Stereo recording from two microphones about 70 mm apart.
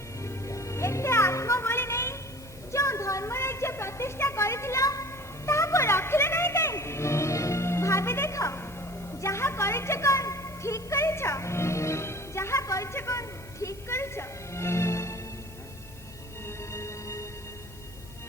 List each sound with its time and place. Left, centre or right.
0.2 s music: left
2.7 s a sound: left
5.5 s music: left
16.5 s music: left